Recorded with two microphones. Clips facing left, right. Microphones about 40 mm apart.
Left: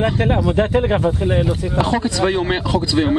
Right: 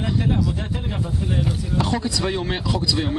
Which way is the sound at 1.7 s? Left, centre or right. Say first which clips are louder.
Left 5 dB; left.